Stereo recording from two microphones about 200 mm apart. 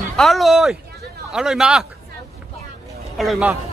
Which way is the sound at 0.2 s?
Centre (ahead or behind).